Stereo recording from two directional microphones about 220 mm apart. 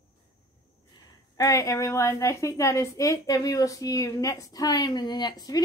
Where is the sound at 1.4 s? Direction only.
15° left (ahead or behind).